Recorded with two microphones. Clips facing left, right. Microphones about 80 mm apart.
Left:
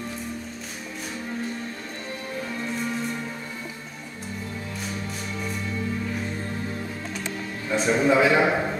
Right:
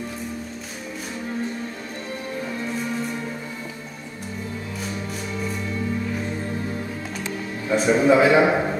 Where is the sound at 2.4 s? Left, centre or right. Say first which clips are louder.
Right 1 dB; centre.